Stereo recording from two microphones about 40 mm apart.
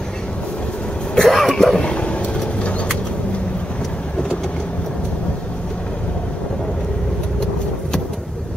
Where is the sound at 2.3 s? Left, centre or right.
Left.